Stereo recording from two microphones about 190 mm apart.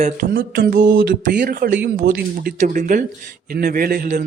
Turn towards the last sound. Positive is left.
turn(degrees=-50)  # may be behind; listen again after turning